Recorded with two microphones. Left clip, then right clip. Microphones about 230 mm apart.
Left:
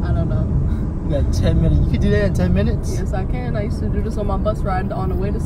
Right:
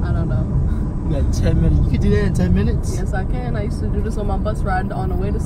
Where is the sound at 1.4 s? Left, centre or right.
Centre.